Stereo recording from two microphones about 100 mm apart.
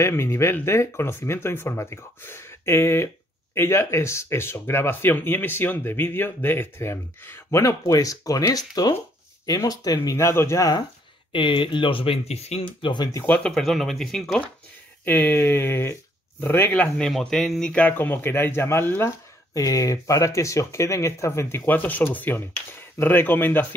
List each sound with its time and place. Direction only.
0.0 s speech: 25° left (ahead or behind)
10.0 s speech: 30° left (ahead or behind)
11.3 s speech: 55° left (ahead or behind)
13.2 s speech: 10° left (ahead or behind)
15.0 s speech: 20° left (ahead or behind)
19.5 s speech: 35° left (ahead or behind); by 23.7 s 20° left (ahead or behind)